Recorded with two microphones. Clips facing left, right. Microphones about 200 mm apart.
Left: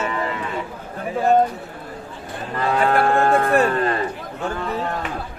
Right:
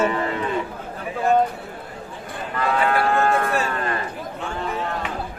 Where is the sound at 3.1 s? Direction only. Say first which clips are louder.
Left 3 dB; 30° left (ahead or behind).